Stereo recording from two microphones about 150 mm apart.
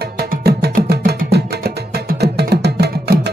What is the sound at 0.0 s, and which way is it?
Music, 90° right.